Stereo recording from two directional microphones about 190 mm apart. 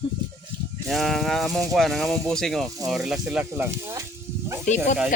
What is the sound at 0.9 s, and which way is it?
Speech, centre (ahead or behind).